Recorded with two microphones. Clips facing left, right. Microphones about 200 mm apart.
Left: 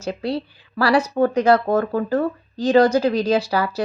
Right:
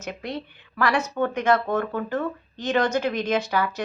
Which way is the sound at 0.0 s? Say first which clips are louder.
Left 7 dB; 35° left (ahead or behind).